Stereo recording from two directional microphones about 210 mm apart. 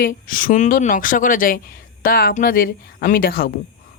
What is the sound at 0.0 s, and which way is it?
A woman's voice, 40° left (ahead or behind).